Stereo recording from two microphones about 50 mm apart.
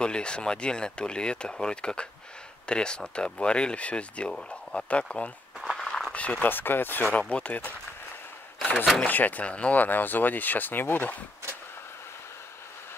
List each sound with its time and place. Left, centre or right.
0.0 s speech: centre
4.8 s speech: left
5.8 s a sound: centre
6.1 s speech: left
6.5 s speech: left
7.2 s speech: left
9.0 s speech: left